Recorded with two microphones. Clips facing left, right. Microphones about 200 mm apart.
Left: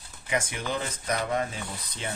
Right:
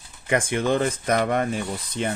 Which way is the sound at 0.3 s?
55° right (ahead or behind).